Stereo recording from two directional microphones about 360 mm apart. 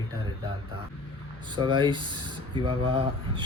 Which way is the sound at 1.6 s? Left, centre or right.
Centre.